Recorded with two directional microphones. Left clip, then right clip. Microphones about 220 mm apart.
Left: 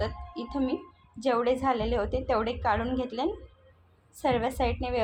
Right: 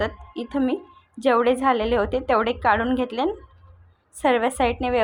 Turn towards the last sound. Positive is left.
turn(degrees=-25)  # may be behind; listen again after turning